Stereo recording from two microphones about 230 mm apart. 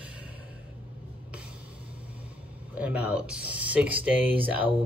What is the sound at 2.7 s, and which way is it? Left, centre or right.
Speech, centre.